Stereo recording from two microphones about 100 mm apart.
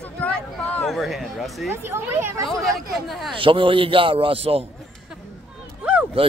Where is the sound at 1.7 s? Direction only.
25° right (ahead or behind).